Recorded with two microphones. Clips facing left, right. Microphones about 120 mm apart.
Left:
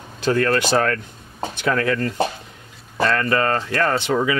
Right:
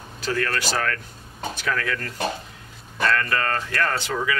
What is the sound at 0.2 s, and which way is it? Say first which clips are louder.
Speech: left 7 dB; 30° left (ahead or behind).